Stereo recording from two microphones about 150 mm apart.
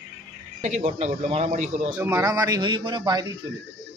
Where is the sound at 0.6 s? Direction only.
50° right (ahead or behind).